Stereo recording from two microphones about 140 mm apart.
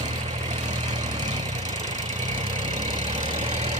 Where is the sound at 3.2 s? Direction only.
60° right (ahead or behind).